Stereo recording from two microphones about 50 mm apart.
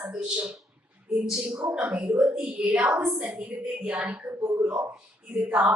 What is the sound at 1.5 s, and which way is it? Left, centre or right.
A woman's voice, right.